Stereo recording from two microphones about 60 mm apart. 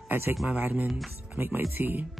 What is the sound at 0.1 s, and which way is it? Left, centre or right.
Speech, right.